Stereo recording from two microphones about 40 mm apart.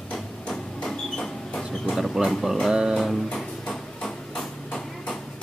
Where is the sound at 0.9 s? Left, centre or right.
Centre.